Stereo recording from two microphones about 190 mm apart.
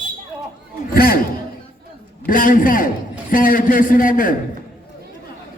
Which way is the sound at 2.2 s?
45° left (ahead or behind).